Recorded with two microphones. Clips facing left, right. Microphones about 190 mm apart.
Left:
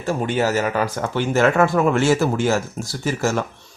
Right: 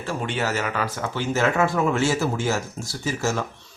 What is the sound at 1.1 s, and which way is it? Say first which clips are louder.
Speech: left 5 dB; 60° left (ahead or behind).